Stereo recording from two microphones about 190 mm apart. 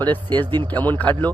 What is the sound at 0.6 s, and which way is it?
Speech, 10° left (ahead or behind).